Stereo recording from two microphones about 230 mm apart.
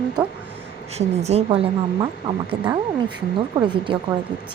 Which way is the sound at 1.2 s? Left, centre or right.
Right.